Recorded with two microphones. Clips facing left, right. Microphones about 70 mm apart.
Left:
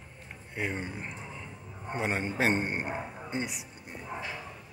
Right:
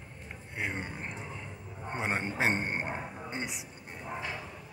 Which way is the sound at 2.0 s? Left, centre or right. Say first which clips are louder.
Left 2 dB; right.